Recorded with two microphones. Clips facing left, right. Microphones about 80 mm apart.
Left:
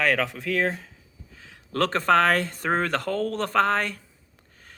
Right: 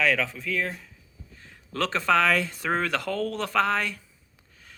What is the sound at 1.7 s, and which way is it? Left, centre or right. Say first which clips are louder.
Speech: left 3 dB; left.